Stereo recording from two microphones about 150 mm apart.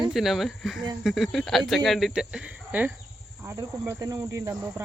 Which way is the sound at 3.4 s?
20° right (ahead or behind).